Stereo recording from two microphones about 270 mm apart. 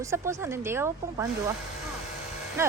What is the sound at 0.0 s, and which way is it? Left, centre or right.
Speech, centre.